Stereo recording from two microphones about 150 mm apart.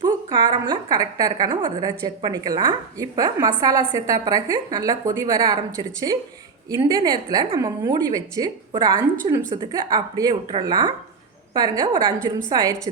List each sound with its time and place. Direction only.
0.0 s a woman's voice: 30° right (ahead or behind)